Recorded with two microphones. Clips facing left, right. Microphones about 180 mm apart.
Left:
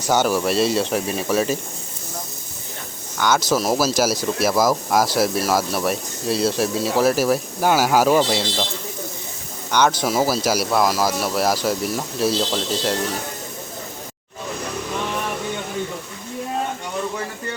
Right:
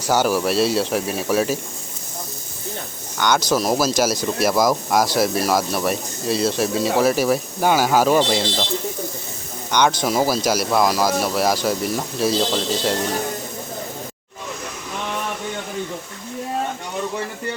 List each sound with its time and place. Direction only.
0.1 s speech: 10° right (ahead or behind)
3.2 s speech: 5° left (ahead or behind)
9.7 s speech: 5° left (ahead or behind)